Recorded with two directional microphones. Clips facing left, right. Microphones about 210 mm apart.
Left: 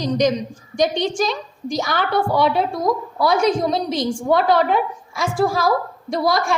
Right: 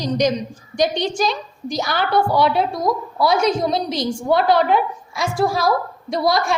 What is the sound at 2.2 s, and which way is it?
A woman's voice, 45° left (ahead or behind).